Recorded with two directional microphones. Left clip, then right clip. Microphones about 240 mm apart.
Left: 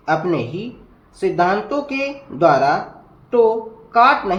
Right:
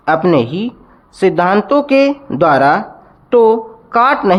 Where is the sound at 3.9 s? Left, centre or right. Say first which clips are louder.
Right 3 dB; right.